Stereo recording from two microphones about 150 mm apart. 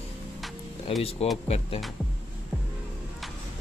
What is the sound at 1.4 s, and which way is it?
Speech, 45° left (ahead or behind).